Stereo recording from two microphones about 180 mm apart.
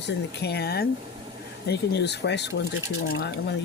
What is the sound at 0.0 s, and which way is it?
Speech, 70° left (ahead or behind).